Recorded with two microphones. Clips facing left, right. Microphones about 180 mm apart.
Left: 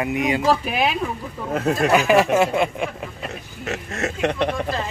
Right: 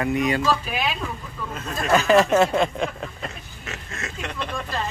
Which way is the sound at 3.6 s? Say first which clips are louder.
Left 10 dB; 65° left (ahead or behind).